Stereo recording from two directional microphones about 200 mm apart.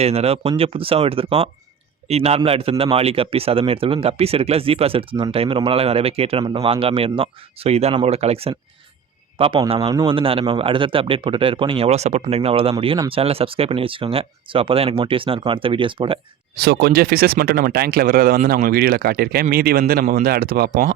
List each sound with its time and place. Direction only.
0.0 s speech: 30° right (ahead or behind)
16.6 s speech: 50° right (ahead or behind)